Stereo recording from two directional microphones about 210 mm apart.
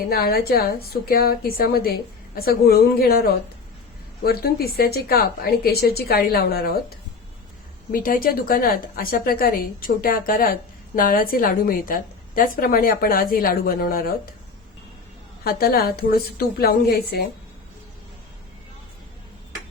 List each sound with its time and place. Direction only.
0.1 s a woman's voice: 45° left (ahead or behind)
7.9 s a woman's voice: 40° left (ahead or behind)
15.4 s a woman's voice: 45° left (ahead or behind)